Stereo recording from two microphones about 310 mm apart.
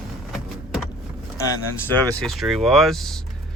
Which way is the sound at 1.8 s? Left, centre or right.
Centre.